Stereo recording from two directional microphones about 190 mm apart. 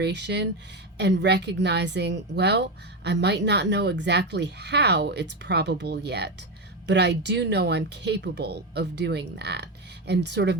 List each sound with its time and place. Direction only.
0.0 s a woman's voice: 65° right (ahead or behind)